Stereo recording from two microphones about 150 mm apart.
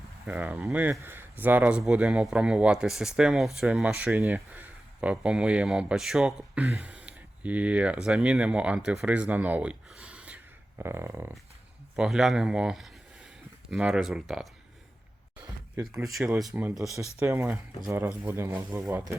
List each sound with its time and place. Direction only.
0.3 s speech: 10° right (ahead or behind)
11.9 s speech: 5° right (ahead or behind)
15.4 s a sound: 20° right (ahead or behind)
16.2 s speech: 10° right (ahead or behind)
16.9 s speech: 20° right (ahead or behind)